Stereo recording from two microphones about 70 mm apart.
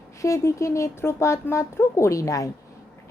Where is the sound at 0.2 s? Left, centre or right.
Left.